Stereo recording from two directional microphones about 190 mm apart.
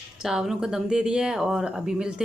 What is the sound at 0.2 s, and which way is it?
Speech, 5° right (ahead or behind).